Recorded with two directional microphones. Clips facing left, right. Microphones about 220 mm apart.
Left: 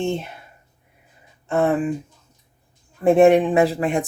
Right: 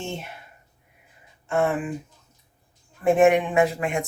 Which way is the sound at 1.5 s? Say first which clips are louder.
Left 4 dB; 35° left (ahead or behind).